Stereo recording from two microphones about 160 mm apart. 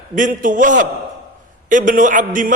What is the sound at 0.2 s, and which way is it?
A man's voice, 55° right (ahead or behind).